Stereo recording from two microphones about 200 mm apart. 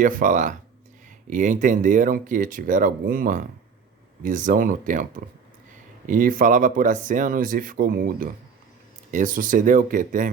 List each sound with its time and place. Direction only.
0.0 s speech: 40° right (ahead or behind)